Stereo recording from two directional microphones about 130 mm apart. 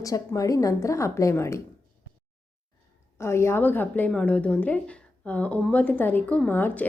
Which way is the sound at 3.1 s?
20° left (ahead or behind).